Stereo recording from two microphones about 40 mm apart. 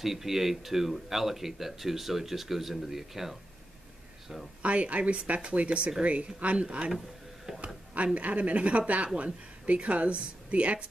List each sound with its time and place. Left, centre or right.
0.0 s speech: centre
4.6 s speech: right